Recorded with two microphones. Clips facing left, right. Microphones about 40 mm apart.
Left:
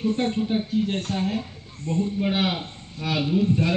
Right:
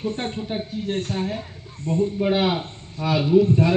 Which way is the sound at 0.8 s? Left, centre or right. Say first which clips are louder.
Right 1 dB; left.